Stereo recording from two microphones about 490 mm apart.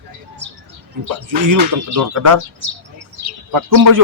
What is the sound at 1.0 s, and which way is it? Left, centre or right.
Speech, right.